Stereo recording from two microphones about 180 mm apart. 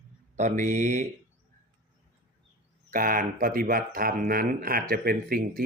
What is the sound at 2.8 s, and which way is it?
Speech, 50° right (ahead or behind).